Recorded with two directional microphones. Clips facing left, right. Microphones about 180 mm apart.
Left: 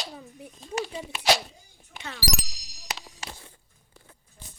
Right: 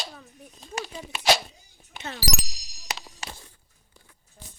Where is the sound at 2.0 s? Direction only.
25° right (ahead or behind).